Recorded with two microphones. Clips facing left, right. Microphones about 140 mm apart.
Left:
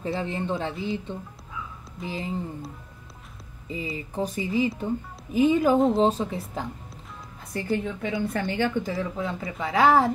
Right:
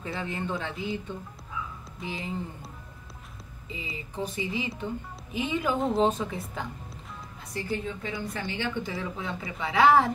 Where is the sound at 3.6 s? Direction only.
45° left (ahead or behind).